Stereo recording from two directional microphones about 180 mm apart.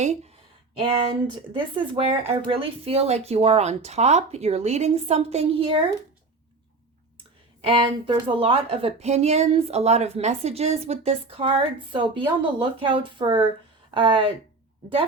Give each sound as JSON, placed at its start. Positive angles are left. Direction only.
{"t": 1.5, "sound": "a woman's voice", "side_deg": -30}
{"t": 7.6, "sound": "a woman's voice", "side_deg": -30}